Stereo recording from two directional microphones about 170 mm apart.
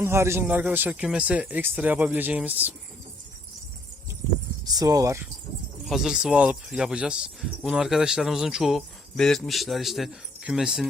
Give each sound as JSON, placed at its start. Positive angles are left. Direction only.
{"t": 0.0, "sound": "speech", "side_deg": -15}
{"t": 4.6, "sound": "speech", "side_deg": -20}
{"t": 5.8, "sound": "speech", "side_deg": 0}